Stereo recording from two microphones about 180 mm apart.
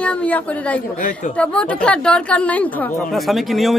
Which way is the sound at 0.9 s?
45° left (ahead or behind).